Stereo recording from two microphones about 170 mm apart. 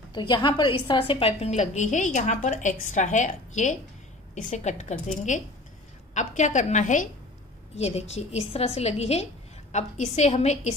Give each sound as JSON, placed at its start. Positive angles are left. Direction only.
{"t": 0.1, "sound": "a woman's voice", "side_deg": 25}
{"t": 6.1, "sound": "a woman's voice", "side_deg": 45}